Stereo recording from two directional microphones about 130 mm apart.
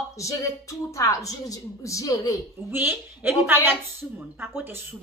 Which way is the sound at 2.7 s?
15° right (ahead or behind).